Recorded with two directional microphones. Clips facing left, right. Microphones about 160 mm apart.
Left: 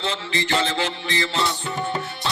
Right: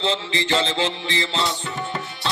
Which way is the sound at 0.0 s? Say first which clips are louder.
Right 2 dB; 25° right (ahead or behind).